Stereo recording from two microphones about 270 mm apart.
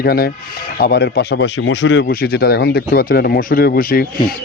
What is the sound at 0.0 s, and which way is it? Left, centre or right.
Speech, left.